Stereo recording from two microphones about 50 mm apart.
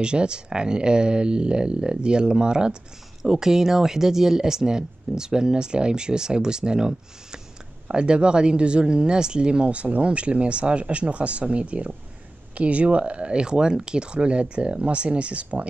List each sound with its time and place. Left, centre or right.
0.0 s speech: centre
7.9 s speech: centre